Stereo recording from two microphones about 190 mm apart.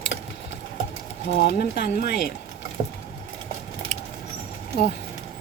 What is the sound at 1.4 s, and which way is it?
Speech, 60° left (ahead or behind).